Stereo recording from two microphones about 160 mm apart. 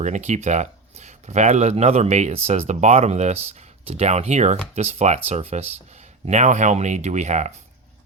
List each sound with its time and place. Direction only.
0.0 s speech: 45° right (ahead or behind)